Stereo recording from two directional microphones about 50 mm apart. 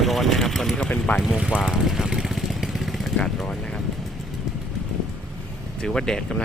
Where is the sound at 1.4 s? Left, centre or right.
Centre.